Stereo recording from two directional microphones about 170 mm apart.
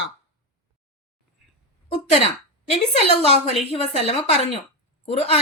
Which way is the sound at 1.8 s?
40° left (ahead or behind).